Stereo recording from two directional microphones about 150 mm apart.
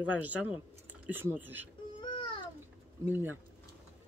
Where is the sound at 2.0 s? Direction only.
35° left (ahead or behind).